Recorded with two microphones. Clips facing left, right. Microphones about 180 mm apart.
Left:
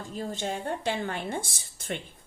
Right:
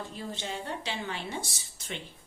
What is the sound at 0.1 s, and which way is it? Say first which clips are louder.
A woman's voice: left 5 dB; 45° left (ahead or behind).